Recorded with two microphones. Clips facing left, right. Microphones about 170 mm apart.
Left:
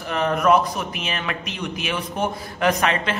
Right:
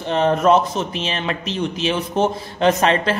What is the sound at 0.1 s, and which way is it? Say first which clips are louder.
A man's voice: right 3 dB; 30° right (ahead or behind).